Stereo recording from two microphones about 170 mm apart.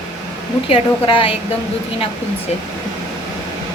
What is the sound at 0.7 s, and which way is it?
Speech, 30° left (ahead or behind).